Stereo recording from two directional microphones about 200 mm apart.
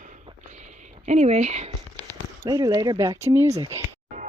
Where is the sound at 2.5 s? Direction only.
20° right (ahead or behind).